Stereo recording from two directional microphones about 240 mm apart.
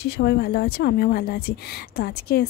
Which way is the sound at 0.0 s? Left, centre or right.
Left.